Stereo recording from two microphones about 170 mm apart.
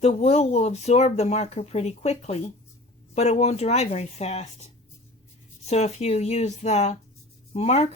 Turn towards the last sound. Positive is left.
turn(degrees=40)  # may be behind; listen again after turning